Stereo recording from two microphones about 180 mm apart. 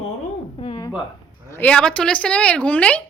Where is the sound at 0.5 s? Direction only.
30° left (ahead or behind).